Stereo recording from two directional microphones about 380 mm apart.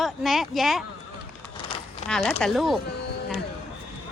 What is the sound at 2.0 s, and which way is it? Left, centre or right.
Speech, centre.